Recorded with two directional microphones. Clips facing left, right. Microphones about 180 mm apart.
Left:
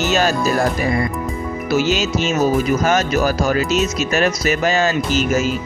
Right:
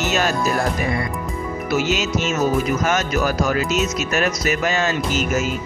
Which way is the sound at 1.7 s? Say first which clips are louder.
Left 3 dB; 30° left (ahead or behind).